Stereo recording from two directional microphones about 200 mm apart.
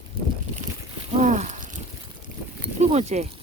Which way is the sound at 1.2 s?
35° right (ahead or behind).